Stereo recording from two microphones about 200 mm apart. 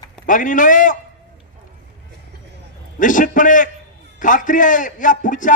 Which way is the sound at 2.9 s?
40° left (ahead or behind).